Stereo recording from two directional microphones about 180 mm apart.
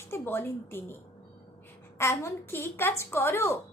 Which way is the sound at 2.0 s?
15° left (ahead or behind).